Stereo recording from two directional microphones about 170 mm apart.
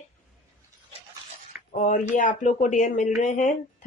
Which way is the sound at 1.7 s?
45° left (ahead or behind).